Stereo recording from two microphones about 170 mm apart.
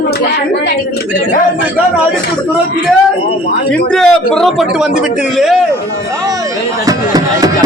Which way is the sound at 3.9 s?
5° left (ahead or behind).